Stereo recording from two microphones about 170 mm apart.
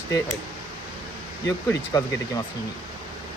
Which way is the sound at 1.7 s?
20° left (ahead or behind).